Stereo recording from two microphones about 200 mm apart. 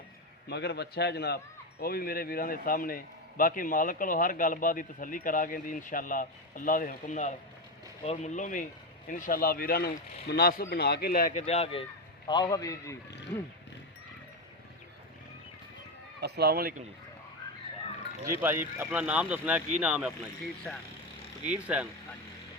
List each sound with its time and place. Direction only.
0.4 s a man's voice: 55° left (ahead or behind); by 13.0 s 15° left (ahead or behind)
16.2 s speech: 55° right (ahead or behind)
18.3 s speech: 10° right (ahead or behind)
21.5 s speech: 5° right (ahead or behind)